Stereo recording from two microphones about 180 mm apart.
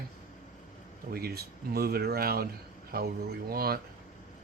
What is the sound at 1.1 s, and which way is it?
Speech, 60° right (ahead or behind).